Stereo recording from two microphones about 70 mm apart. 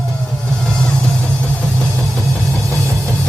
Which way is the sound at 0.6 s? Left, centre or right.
Centre.